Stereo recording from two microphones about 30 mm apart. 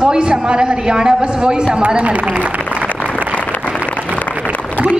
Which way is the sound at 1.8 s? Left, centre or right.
Right.